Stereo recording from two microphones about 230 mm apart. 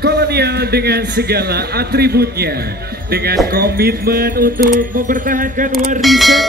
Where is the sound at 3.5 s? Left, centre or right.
Right.